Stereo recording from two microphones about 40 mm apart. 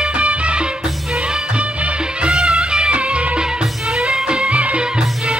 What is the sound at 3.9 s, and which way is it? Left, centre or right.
Music, centre.